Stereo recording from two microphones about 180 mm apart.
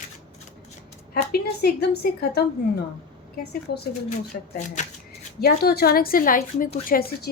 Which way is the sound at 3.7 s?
65° left (ahead or behind).